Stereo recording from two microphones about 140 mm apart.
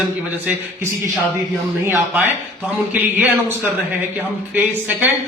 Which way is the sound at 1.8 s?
15° right (ahead or behind).